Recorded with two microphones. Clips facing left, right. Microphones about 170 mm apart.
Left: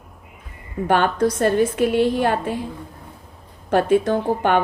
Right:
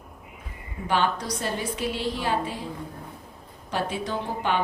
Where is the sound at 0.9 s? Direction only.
55° left (ahead or behind).